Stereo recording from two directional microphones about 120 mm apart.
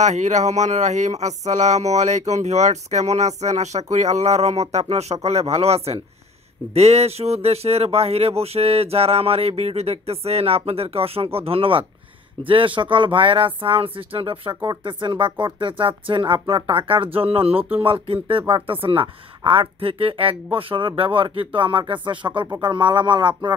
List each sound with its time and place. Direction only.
0.0 s speech: 85° right; by 23.5 s 40° right (ahead or behind)